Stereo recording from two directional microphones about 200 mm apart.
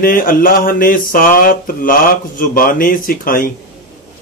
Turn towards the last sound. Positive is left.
turn(degrees=45)  # may be behind; listen again after turning